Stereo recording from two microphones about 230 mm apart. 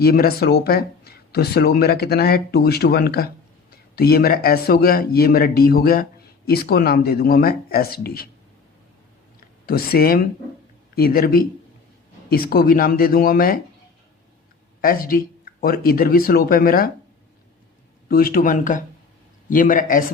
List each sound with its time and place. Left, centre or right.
0.0 s a man's voice: left
9.6 s a man's voice: left
14.8 s a man's voice: left
18.1 s a man's voice: left